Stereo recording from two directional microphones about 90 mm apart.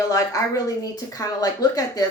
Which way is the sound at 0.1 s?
40° left (ahead or behind).